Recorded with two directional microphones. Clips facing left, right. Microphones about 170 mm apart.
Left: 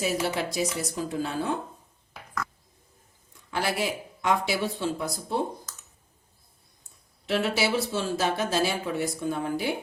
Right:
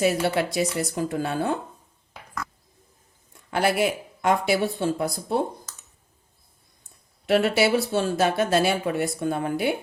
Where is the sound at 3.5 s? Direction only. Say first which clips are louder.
Right 6 dB; 60° right (ahead or behind).